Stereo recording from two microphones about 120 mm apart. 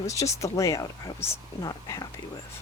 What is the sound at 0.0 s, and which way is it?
Speech, 25° left (ahead or behind).